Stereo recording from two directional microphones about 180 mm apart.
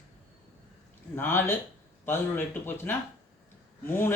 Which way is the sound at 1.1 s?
10° left (ahead or behind).